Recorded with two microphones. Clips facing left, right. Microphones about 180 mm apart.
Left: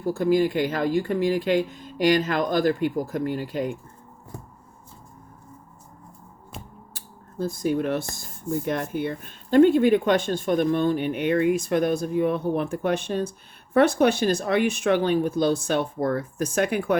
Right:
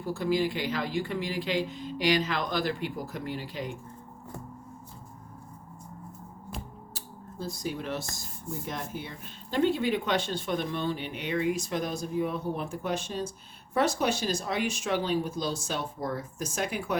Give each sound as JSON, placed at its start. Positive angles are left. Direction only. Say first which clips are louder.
{"t": 0.0, "sound": "speech", "louder": "left 7 dB", "side_deg": 45}
{"t": 6.9, "sound": "a sound", "louder": "left 9 dB", "side_deg": 50}
{"t": 8.1, "sound": "speech", "louder": "left 10 dB", "side_deg": 60}